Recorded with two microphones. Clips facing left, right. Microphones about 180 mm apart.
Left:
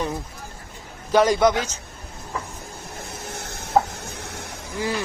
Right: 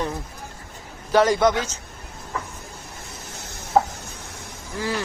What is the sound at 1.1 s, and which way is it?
Speech, 15° left (ahead or behind).